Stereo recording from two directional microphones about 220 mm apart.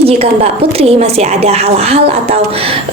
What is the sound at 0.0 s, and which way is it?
A woman's voice, 25° right (ahead or behind).